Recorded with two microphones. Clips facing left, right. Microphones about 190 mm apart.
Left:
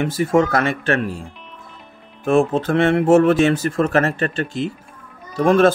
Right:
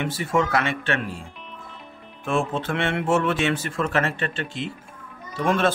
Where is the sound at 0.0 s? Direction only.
45° left (ahead or behind).